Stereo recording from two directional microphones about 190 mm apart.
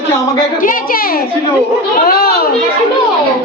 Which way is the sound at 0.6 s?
45° left (ahead or behind).